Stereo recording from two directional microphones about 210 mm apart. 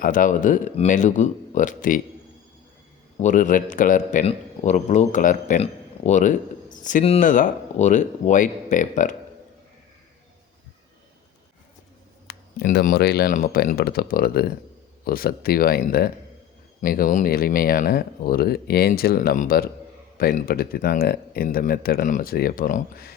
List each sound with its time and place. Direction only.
0.0 s a man's voice: 40° left (ahead or behind)
3.2 s a man's voice: 35° left (ahead or behind)
12.3 s speech: 50° left (ahead or behind)